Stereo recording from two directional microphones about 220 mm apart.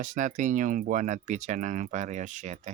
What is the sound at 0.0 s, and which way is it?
Speech, 35° right (ahead or behind).